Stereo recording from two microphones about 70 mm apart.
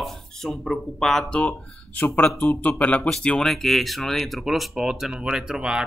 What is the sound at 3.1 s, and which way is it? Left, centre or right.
Speech, centre.